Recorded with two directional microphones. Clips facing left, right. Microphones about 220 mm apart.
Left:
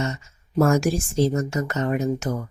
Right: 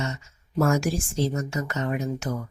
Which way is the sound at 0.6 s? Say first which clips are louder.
Left 4 dB; 45° left (ahead or behind).